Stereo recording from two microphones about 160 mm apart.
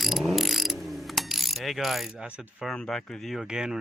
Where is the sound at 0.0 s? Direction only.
Centre (ahead or behind).